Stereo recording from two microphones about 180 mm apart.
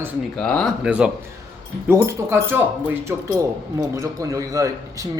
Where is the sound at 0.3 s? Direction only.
5° left (ahead or behind).